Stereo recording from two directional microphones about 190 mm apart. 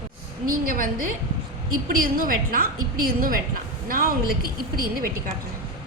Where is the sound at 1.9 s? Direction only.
50° right (ahead or behind).